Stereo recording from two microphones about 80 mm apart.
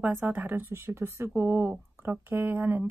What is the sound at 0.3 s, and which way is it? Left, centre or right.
A woman's voice, right.